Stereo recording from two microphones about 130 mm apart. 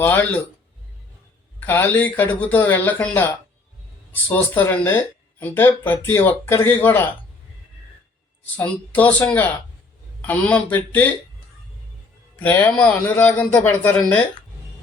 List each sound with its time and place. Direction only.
0.0 s speech: 15° left (ahead or behind)
1.5 s speech: 15° left (ahead or behind)
8.5 s speech: 10° left (ahead or behind)
12.4 s speech: 15° left (ahead or behind)